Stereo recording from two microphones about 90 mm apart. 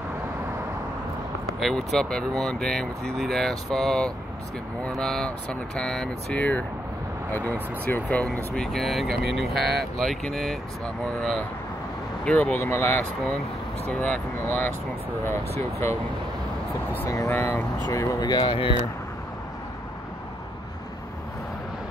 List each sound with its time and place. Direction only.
1.6 s speech: centre (ahead or behind)
12.3 s speech: 15° left (ahead or behind)
12.5 s speech: 30° left (ahead or behind)
13.8 s speech: 15° left (ahead or behind)
17.3 s speech: 30° left (ahead or behind)
18.2 s speech: 55° left (ahead or behind)